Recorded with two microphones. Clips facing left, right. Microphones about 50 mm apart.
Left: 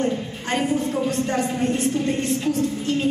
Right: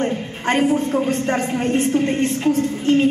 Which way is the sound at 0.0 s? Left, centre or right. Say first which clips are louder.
Right 3 dB; right.